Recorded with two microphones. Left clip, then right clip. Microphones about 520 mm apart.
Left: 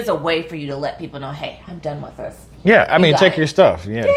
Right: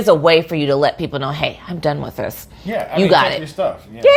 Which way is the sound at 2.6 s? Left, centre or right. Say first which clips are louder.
Left 4 dB; left.